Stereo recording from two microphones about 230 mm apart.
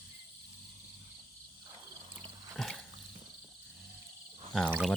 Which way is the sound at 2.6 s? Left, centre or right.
Centre.